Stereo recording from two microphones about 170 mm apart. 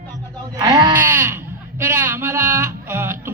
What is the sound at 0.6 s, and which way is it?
Speech, 20° right (ahead or behind).